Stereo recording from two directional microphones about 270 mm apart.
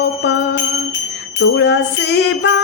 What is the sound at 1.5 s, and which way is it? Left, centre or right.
Music, left.